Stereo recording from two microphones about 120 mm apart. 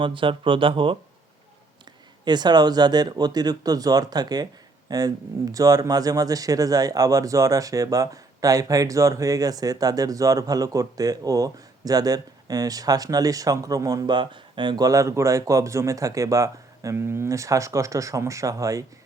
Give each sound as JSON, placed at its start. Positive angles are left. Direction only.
{"t": 0.0, "sound": "speech", "side_deg": -45}
{"t": 2.2, "sound": "speech", "side_deg": -35}